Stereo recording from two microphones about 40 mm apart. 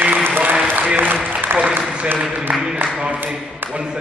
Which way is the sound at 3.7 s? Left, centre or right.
Right.